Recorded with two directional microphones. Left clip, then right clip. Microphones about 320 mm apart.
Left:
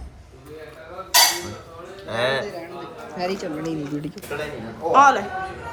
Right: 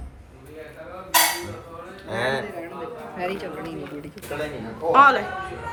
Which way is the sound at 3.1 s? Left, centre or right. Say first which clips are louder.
Left 3 dB; left.